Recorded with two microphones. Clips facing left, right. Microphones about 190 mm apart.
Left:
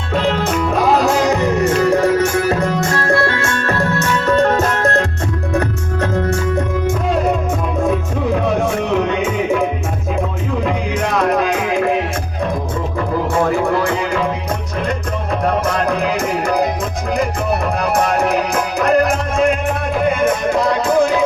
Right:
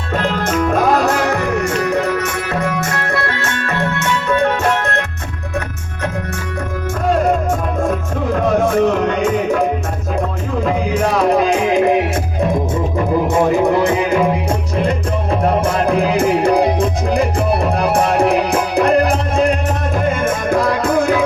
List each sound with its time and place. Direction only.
0.4 s music: 5° left (ahead or behind)
2.1 s music: 30° left (ahead or behind)
10.9 s music: 10° right (ahead or behind)
15.6 s music: 30° right (ahead or behind)